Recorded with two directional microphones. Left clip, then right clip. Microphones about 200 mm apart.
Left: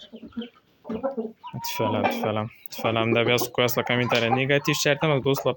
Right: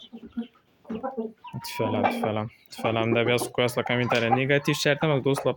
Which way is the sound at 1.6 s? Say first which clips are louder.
Left 1 dB; centre (ahead or behind).